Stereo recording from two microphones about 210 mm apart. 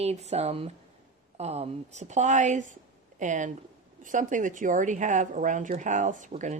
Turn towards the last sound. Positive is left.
turn(degrees=-35)  # may be behind; listen again after turning